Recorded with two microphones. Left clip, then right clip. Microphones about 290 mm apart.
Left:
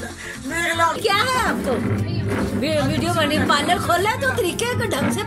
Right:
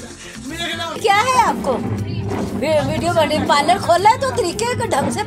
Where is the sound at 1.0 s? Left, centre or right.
Right.